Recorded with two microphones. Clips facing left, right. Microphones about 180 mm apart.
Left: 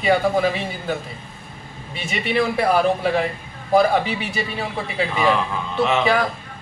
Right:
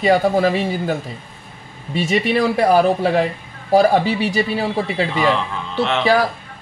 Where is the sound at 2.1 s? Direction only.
40° right (ahead or behind).